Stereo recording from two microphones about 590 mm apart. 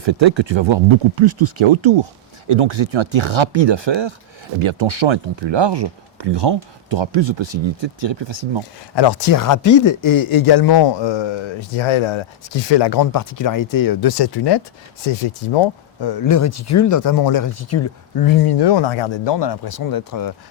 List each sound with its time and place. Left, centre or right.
0.0 s speech: right
9.0 s speech: left
15.0 s speech: left